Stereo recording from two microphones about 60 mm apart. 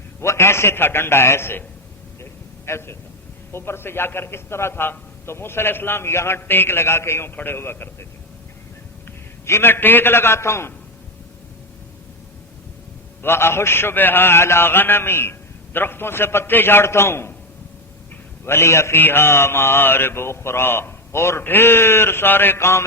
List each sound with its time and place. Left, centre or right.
0.2 s a man's voice: left
2.6 s a man's voice: left
9.5 s a man's voice: left
13.2 s a man's voice: left
18.4 s a man's voice: left
18.9 s a man's voice: left